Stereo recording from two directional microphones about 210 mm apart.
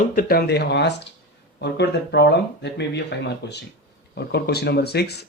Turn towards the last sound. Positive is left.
turn(degrees=50)  # may be behind; listen again after turning